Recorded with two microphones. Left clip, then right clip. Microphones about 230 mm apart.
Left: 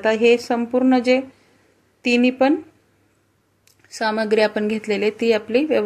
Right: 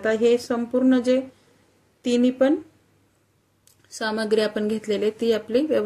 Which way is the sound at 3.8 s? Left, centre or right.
Centre.